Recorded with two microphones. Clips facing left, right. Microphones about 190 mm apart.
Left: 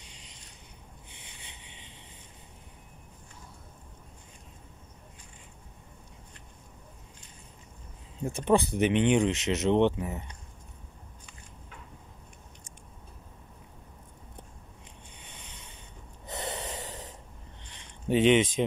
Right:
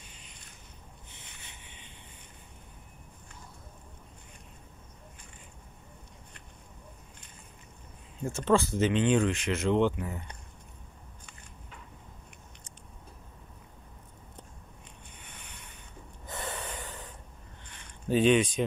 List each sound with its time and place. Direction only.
0.0 s a sound: 90° left
8.2 s speech: 15° left (ahead or behind)
15.3 s boat: 20° left (ahead or behind)
16.3 s snort: 20° left (ahead or behind)
18.0 s speech: 20° left (ahead or behind)